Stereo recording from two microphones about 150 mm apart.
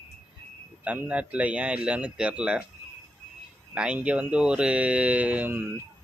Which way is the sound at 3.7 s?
5° right (ahead or behind).